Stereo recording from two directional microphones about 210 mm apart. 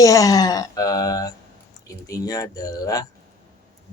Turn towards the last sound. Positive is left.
turn(degrees=15)  # may be behind; listen again after turning